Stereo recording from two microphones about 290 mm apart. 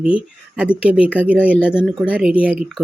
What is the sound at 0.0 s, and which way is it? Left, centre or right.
Speech, centre.